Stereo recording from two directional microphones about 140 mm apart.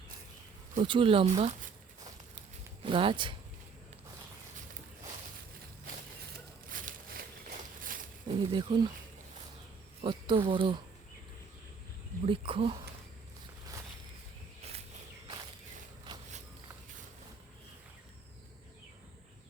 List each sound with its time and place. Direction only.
0.8 s speech: 40° right (ahead or behind)
2.8 s speech: 40° right (ahead or behind)
6.7 s a sound: 75° right (ahead or behind)
8.3 s speech: 35° right (ahead or behind)
10.0 s speech: 40° right (ahead or behind)
12.2 s speech: 40° right (ahead or behind)
14.6 s walk: 50° right (ahead or behind)